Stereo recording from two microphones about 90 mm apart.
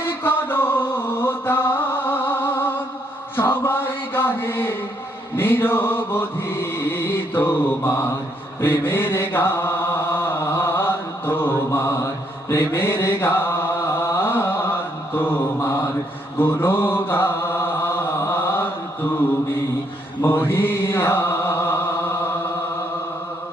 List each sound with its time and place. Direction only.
0.0 s mantra: 25° left (ahead or behind)
20.2 s mantra: 25° left (ahead or behind)